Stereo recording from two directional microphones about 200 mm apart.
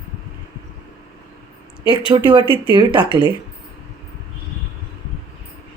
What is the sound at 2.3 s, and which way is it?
Speech, 25° right (ahead or behind).